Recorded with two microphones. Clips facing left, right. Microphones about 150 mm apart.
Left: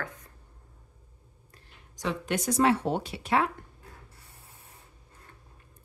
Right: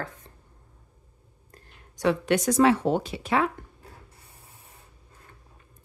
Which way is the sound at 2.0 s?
70° right (ahead or behind).